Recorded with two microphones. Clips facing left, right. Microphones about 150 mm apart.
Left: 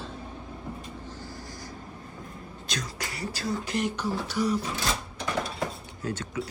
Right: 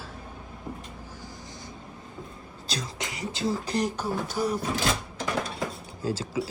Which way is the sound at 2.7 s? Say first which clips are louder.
Right 1 dB; 25° right (ahead or behind).